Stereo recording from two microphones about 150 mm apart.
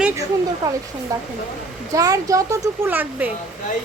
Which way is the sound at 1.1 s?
25° right (ahead or behind).